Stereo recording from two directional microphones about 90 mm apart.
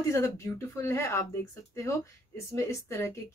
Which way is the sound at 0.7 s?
30° left (ahead or behind).